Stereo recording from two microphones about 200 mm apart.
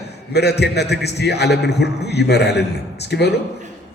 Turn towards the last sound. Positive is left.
turn(degrees=55)  # may be behind; listen again after turning